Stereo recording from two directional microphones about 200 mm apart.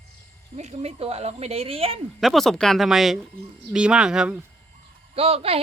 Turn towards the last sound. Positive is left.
turn(degrees=-30)  # may be behind; listen again after turning